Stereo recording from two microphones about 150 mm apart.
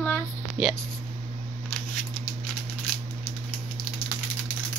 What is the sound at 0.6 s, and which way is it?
Speech, 5° right (ahead or behind).